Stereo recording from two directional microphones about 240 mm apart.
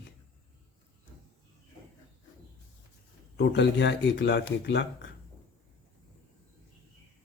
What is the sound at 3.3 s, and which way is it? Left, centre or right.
Speech, left.